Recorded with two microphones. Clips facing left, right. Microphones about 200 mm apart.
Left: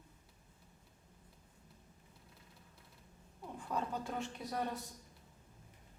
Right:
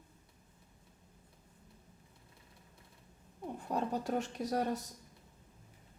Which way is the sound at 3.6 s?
40° right (ahead or behind).